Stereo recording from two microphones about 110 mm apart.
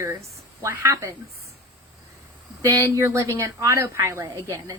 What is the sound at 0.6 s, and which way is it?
Speech, 25° right (ahead or behind).